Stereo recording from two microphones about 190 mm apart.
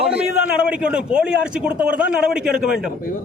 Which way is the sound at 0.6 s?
5° right (ahead or behind).